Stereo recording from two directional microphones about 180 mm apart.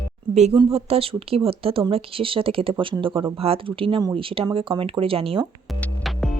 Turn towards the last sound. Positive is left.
turn(degrees=0)  # may be behind; listen again after turning